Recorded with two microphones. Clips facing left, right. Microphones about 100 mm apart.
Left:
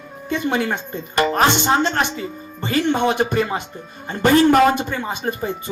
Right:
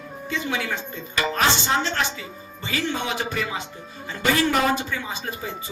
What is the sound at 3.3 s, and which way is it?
Speech, 45° left (ahead or behind).